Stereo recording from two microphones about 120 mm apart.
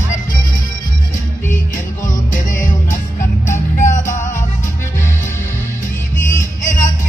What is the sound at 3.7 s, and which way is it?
Music, 90° left.